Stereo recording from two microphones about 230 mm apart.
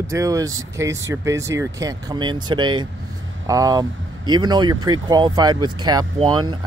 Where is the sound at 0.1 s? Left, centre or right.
Centre.